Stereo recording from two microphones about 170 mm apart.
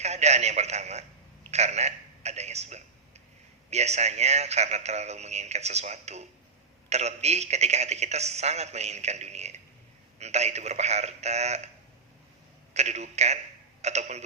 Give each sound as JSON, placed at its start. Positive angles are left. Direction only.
{"t": 0.0, "sound": "a man's voice", "side_deg": -40}
{"t": 12.7, "sound": "a man's voice", "side_deg": -40}